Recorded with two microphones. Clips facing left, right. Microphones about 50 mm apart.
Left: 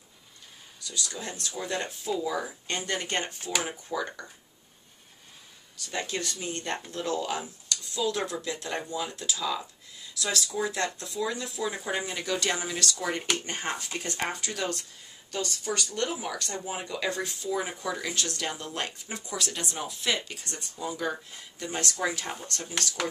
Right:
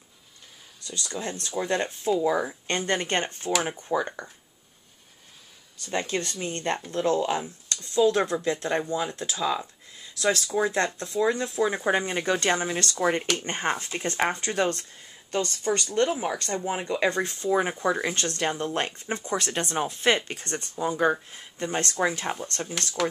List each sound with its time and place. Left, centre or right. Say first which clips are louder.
0.8 s speech: right 3 dB; right
5.9 s speech: right 4 dB; right